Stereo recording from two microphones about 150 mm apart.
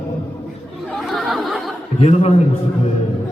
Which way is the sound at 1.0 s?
Centre (ahead or behind).